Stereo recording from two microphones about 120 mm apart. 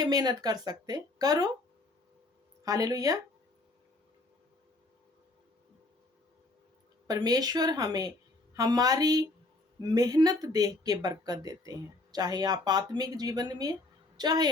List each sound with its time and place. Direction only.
0.0 s speech: 35° right (ahead or behind)
2.6 s speech: 30° right (ahead or behind)
7.1 s speech: 35° right (ahead or behind)